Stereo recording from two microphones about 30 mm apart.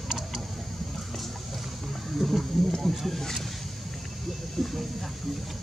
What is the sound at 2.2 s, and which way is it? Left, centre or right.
Speech, centre.